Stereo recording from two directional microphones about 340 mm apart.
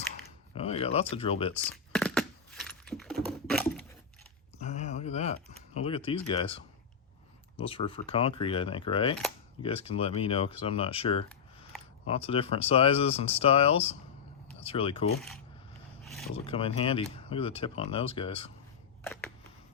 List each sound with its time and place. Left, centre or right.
0.5 s speech: centre
1.7 s keys jangling: centre
3.2 s typing: centre
4.5 s a sound: centre
5.7 s speech: centre
7.6 s speech: centre
16.0 s speech: centre
16.5 s speech: centre
19.0 s a sound: centre